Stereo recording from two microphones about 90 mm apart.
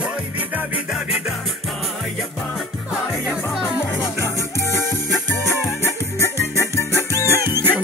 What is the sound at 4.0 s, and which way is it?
Music, 35° left (ahead or behind).